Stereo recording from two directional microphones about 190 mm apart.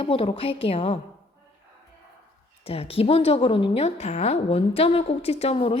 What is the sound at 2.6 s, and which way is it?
A woman's voice, 30° left (ahead or behind).